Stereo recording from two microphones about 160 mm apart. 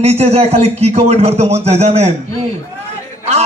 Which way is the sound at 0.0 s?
40° right (ahead or behind).